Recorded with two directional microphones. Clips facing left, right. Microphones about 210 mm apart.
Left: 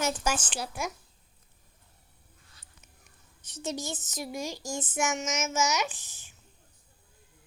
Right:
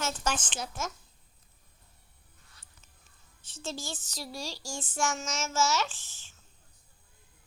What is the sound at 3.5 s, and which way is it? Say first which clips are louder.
Speech: left 4 dB; 20° left (ahead or behind).